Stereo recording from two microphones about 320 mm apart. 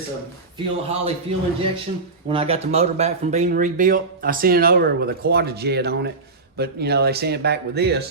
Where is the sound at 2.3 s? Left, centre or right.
Centre.